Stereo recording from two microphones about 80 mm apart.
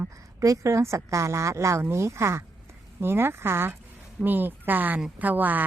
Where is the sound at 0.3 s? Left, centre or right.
Right.